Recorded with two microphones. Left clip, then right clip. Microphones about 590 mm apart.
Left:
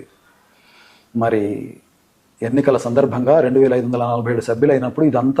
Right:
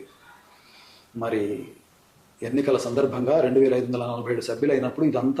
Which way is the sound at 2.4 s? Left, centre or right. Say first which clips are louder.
Left 7 dB; left.